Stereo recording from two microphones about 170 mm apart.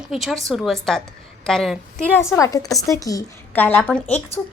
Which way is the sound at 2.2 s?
15° left (ahead or behind).